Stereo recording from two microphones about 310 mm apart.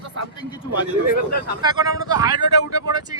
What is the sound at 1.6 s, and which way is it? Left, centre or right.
Speech, centre.